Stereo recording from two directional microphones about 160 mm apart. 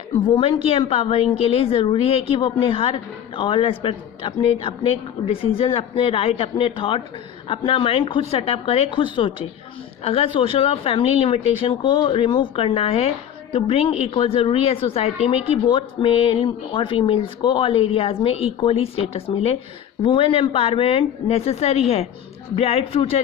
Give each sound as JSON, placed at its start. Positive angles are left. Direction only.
{"t": 0.1, "sound": "speech", "side_deg": 30}